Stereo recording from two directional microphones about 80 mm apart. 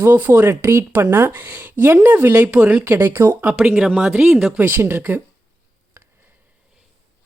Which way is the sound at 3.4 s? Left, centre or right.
Right.